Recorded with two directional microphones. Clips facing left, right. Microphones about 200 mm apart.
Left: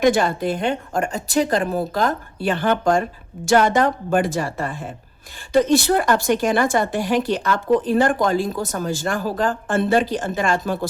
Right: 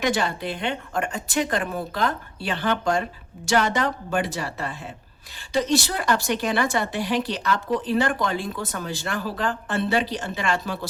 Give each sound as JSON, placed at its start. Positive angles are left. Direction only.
{"t": 0.0, "sound": "a woman's voice", "side_deg": 50}